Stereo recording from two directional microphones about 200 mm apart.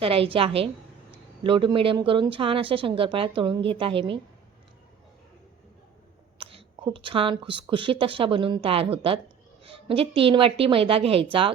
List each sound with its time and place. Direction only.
0.0 s speech: 30° right (ahead or behind)
6.4 s speech: 25° right (ahead or behind)